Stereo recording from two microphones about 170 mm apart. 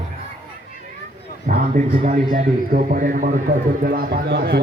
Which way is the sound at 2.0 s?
40° right (ahead or behind).